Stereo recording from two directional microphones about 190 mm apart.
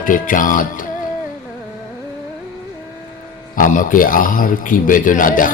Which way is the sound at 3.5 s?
45° left (ahead or behind).